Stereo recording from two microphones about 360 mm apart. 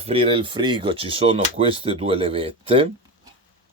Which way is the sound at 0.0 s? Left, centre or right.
Centre.